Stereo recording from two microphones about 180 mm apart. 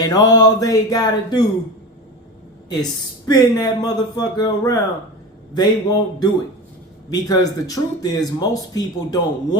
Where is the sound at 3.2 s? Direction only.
20° left (ahead or behind).